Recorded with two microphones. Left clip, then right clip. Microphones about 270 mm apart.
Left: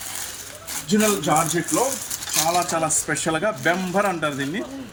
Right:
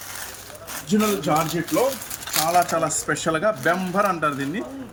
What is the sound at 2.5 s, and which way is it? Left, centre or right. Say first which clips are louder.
Speech: right 2 dB; centre.